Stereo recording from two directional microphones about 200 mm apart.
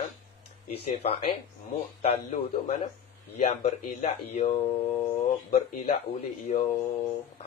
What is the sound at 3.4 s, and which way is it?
A man's voice, 30° left (ahead or behind).